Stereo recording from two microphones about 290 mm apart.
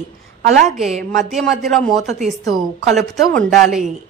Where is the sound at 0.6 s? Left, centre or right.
Centre.